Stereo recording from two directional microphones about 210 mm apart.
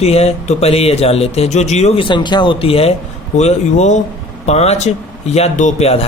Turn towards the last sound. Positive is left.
turn(degrees=30)  # may be behind; listen again after turning